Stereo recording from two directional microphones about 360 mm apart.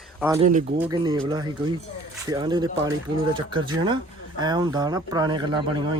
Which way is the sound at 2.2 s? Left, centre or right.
Centre.